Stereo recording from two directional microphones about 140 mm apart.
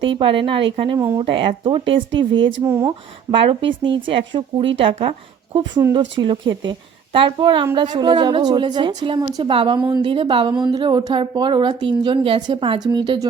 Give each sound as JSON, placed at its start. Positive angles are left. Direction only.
{"t": 0.0, "sound": "a woman's voice", "side_deg": -35}
{"t": 0.9, "sound": "speech", "side_deg": -20}
{"t": 1.2, "sound": "a woman's voice", "side_deg": -40}
{"t": 2.6, "sound": "speech", "side_deg": -20}
{"t": 3.4, "sound": "a woman's voice", "side_deg": -40}